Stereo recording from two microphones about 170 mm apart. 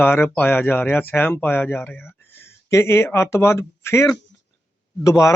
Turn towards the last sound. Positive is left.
turn(degrees=15)  # may be behind; listen again after turning